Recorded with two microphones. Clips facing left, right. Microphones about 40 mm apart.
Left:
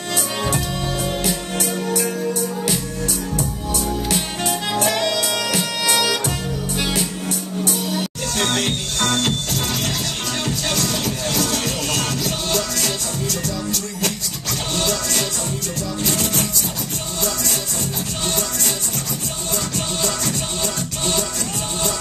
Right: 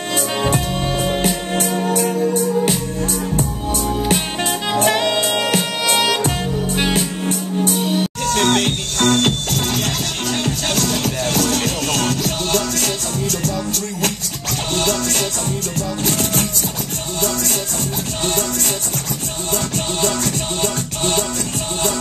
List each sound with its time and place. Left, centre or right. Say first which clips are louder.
0.5 s music: right 3 dB; right
2.6 s music: right 4 dB; right
8.3 s music: right 5 dB; right
14.8 s music: right 3 dB; right
20.6 s music: right 4 dB; right